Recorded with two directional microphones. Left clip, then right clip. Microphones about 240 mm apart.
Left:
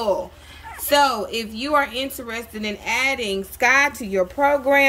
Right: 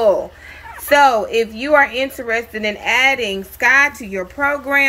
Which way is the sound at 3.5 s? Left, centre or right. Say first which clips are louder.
Right 4 dB; centre.